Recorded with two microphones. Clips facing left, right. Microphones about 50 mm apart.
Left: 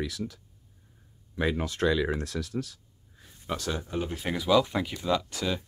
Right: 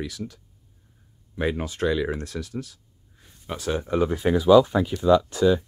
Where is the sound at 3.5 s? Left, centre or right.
Right.